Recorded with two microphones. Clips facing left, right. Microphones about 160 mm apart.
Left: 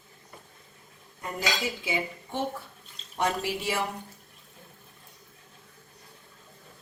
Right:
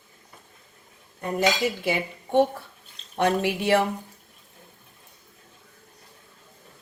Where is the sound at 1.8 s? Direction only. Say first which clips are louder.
Right 4 dB; 60° right (ahead or behind).